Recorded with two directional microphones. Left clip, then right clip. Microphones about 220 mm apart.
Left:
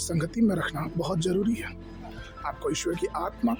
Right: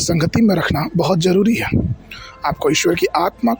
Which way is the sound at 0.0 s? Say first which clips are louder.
Right 11 dB; 30° right (ahead or behind).